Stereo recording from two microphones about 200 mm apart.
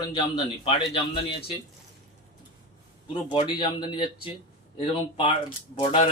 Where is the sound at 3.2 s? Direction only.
25° left (ahead or behind).